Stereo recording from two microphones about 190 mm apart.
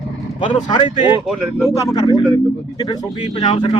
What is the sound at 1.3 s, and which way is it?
Speech, centre (ahead or behind).